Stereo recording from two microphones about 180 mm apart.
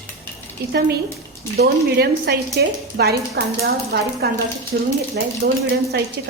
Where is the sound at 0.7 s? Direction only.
65° right (ahead or behind).